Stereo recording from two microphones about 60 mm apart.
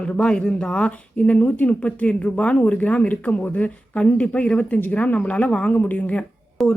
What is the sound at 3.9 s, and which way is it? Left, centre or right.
Speech, centre.